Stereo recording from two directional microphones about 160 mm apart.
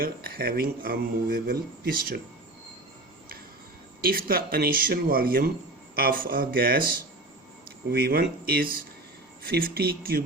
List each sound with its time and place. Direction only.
0.0 s speech: 70° right (ahead or behind)
4.0 s speech: 65° right (ahead or behind)